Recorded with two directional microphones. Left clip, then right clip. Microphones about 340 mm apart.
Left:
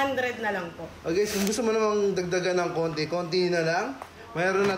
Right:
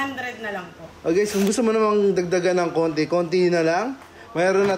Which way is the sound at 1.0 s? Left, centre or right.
Right.